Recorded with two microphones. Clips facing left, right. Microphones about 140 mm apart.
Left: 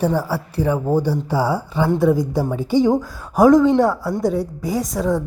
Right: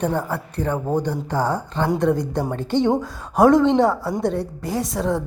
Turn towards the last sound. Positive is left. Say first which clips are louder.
# left 2 dB
turn(degrees=0)  # may be behind; listen again after turning